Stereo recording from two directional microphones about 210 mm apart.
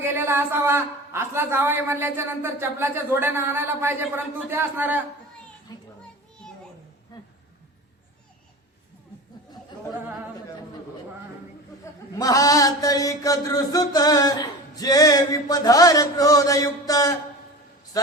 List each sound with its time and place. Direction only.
0.0 s a woman's voice: 10° right (ahead or behind)
7.1 s a sound: 20° left (ahead or behind)
12.1 s mantra: 15° left (ahead or behind)